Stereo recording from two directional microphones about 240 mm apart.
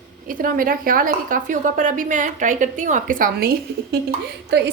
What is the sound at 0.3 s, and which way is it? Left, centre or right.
A woman's voice, right.